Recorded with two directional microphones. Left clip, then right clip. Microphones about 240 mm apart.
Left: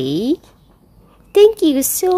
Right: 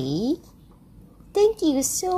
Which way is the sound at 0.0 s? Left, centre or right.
Left.